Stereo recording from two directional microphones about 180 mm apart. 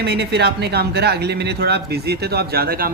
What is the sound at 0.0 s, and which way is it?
Speech, 65° right (ahead or behind).